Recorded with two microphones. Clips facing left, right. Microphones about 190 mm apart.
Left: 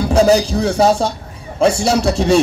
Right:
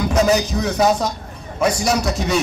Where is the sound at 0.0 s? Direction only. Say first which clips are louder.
Left 5 dB; 30° left (ahead or behind).